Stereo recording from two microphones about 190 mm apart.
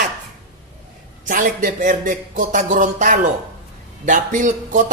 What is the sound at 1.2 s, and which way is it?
A man's voice, 45° right (ahead or behind).